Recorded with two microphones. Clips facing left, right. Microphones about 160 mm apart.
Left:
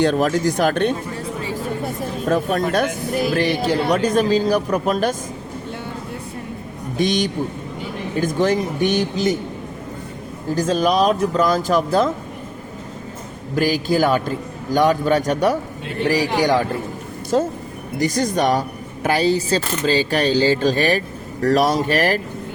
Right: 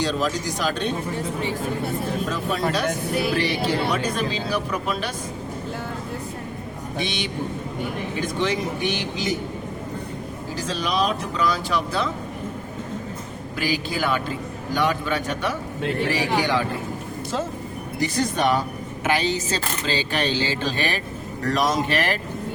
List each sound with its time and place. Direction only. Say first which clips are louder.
0.0 s speech: left 7 dB; 55° left (ahead or behind)
2.3 s speech: left 9 dB; 55° left (ahead or behind)
7.0 s speech: left 10 dB; 45° left (ahead or behind)
8.4 s speech: left 6 dB; 45° left (ahead or behind)
10.5 s speech: left 9 dB; 50° left (ahead or behind)
13.6 s speech: left 8 dB; 45° left (ahead or behind)